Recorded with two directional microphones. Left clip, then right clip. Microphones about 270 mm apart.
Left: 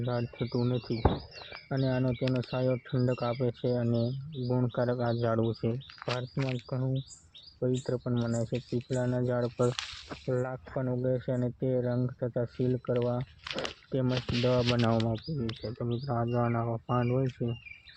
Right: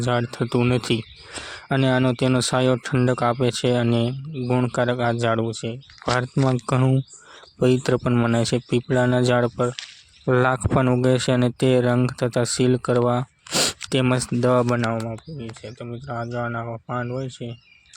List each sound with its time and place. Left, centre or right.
0.0 s speech: right
6.7 s speech: right
10.2 s speech: right
14.8 s speech: right